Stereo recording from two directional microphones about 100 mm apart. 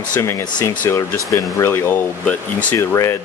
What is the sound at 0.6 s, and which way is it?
Speech, 25° left (ahead or behind).